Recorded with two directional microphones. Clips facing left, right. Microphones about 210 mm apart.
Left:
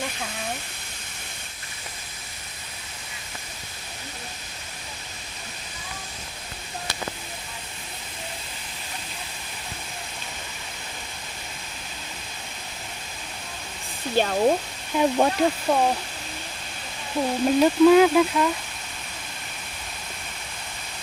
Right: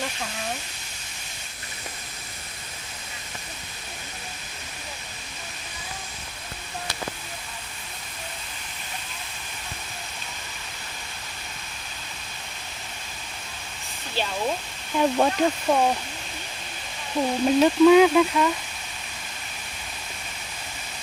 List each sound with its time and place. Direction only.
14.2 s speech: 50° left (ahead or behind)
14.9 s speech: 5° left (ahead or behind)
17.2 s speech: centre (ahead or behind)